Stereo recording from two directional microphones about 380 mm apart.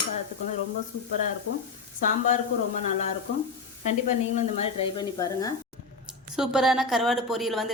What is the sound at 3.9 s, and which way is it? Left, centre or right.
Speech, centre.